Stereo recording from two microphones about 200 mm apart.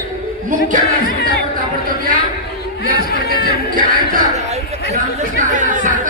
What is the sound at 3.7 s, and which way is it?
Speech, 40° right (ahead or behind).